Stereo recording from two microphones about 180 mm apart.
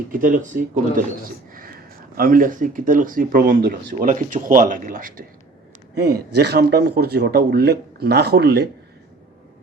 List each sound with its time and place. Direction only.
0.1 s speech: 50° right (ahead or behind)
2.1 s speech: 50° right (ahead or behind)
5.9 s a man's voice: 65° right (ahead or behind)